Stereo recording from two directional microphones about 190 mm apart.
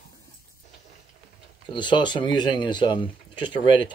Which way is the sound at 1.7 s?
25° left (ahead or behind).